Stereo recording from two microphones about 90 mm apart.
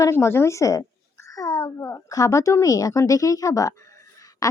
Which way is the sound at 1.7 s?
40° left (ahead or behind).